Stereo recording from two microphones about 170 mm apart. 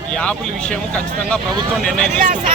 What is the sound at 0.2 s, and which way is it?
Speech, 5° left (ahead or behind).